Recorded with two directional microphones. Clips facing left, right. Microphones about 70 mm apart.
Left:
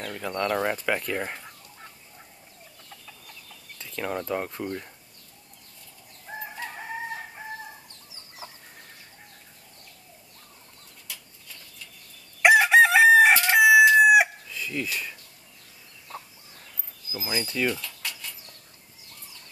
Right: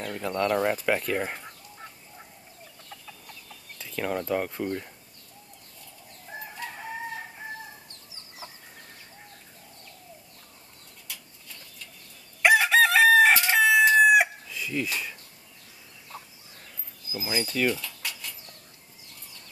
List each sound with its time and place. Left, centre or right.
0.0 s speech: centre
0.7 s fowl: centre
2.9 s chicken: centre
4.1 s speech: centre
12.4 s chicken: centre
17.1 s speech: centre